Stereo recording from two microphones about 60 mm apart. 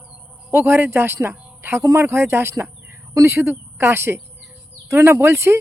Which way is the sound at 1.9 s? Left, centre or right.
Right.